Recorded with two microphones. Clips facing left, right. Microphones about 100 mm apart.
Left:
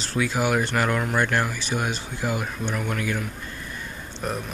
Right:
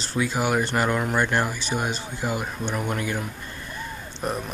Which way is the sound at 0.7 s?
20° right (ahead or behind).